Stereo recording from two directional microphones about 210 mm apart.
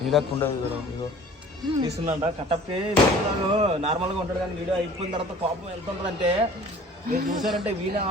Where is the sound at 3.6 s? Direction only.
30° right (ahead or behind).